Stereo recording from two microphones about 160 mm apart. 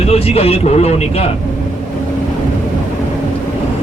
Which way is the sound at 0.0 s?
40° left (ahead or behind).